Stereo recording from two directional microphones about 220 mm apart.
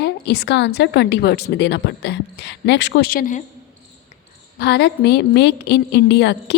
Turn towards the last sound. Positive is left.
turn(degrees=50)  # may be behind; listen again after turning